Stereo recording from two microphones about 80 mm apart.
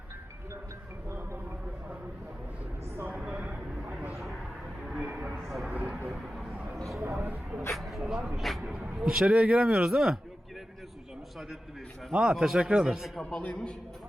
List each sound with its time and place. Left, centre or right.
3.1 s speech: centre
4.9 s speech: centre
5.4 s a man's voice: centre
6.1 s vehicle: centre
6.7 s speech: centre
7.0 s speech: centre
7.8 s a man's voice: centre
12.1 s a man's voice: centre
13.3 s a man's voice: centre